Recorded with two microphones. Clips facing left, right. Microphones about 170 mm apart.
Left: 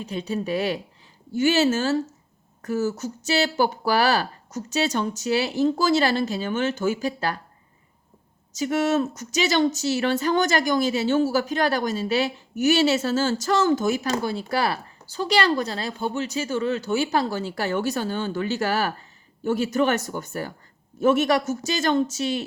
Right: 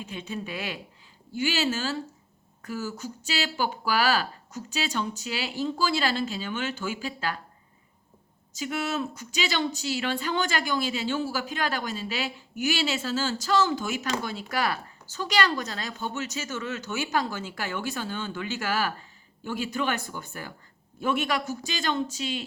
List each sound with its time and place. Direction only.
0.0 s speech: 40° left (ahead or behind)
8.5 s speech: 40° left (ahead or behind)